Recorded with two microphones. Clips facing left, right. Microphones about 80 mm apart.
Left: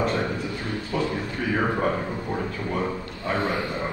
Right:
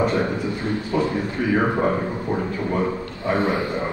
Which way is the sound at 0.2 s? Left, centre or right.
Right.